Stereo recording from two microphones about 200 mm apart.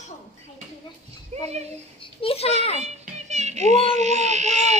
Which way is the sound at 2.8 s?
35° right (ahead or behind).